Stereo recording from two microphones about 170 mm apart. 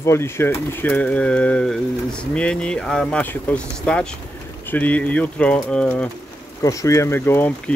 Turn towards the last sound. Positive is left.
turn(degrees=15)  # may be behind; listen again after turning